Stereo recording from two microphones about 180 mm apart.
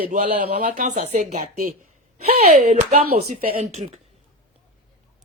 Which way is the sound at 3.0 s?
60° right (ahead or behind).